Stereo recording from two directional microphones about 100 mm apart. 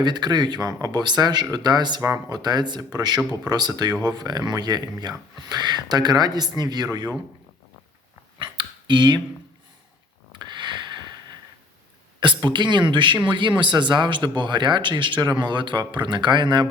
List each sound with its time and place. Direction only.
0.0 s speech: 45° right (ahead or behind)
8.4 s finger snapping: 50° right (ahead or behind)
10.3 s a sound: 50° right (ahead or behind)
12.2 s speech: 50° right (ahead or behind)